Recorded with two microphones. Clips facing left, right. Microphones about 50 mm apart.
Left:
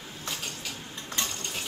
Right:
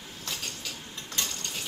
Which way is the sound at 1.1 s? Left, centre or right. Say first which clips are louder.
Left 1 dB; left.